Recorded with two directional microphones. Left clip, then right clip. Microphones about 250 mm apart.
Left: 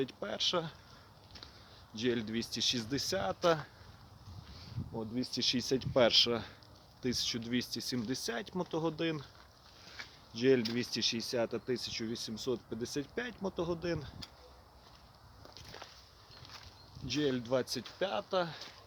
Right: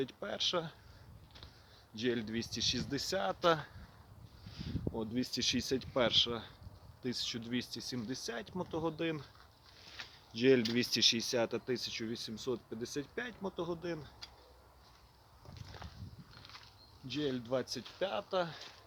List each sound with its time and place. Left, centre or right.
0.0 s speech: centre
2.0 s speech: centre
4.9 s speech: centre; by 6.5 s left
7.0 s speech: centre
10.3 s speech: centre
17.1 s speech: left; by 18.7 s centre